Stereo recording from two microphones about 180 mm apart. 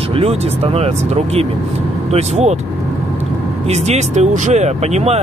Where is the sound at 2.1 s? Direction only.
35° right (ahead or behind).